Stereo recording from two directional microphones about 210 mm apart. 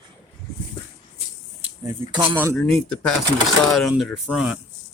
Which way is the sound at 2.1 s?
20° right (ahead or behind).